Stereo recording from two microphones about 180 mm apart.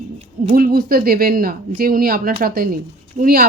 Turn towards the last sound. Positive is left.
turn(degrees=-55)  # may be behind; listen again after turning